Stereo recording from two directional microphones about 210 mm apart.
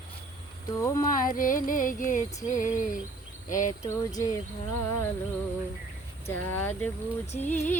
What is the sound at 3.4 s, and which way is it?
Speech, 40° left (ahead or behind).